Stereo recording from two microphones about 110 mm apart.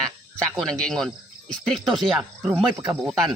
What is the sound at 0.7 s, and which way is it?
Speech, 5° left (ahead or behind).